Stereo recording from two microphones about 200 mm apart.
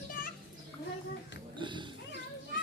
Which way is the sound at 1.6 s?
25° right (ahead or behind).